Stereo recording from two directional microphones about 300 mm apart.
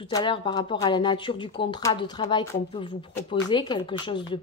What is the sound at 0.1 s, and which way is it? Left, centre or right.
Speech, centre.